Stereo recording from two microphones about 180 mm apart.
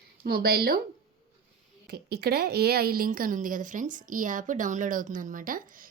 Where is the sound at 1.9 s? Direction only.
65° right (ahead or behind).